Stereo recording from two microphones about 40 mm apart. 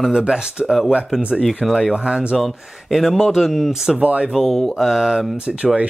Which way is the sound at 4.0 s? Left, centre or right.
Right.